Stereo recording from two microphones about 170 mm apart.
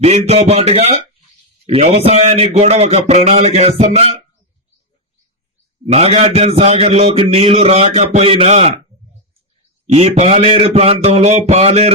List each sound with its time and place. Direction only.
0.0 s a man's voice: 35° right (ahead or behind)
5.8 s a man's voice: 40° right (ahead or behind)
9.8 s a man's voice: 40° right (ahead or behind)